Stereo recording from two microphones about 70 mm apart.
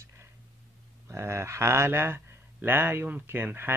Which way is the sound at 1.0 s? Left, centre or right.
Right.